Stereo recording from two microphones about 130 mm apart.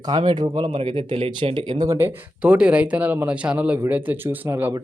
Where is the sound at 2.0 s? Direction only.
15° right (ahead or behind).